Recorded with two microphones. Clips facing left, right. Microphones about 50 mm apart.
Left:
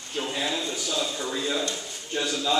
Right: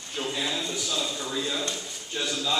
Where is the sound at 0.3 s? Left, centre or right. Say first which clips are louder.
Left 1 dB; centre.